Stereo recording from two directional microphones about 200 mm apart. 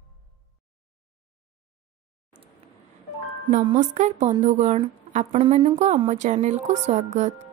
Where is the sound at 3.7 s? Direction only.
35° right (ahead or behind).